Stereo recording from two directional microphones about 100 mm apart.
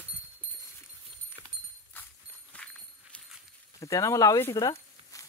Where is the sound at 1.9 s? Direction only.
20° left (ahead or behind).